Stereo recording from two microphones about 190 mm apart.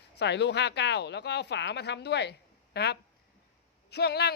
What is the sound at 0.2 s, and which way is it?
A man's voice, 65° left (ahead or behind).